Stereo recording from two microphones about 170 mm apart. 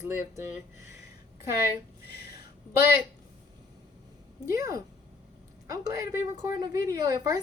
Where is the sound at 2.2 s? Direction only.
65° left (ahead or behind).